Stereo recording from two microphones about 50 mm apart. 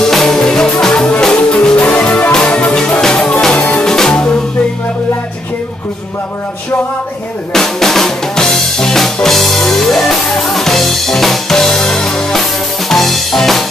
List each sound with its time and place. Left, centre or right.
0.0 s music: centre
7.5 s drum kit: centre
12.0 s music: centre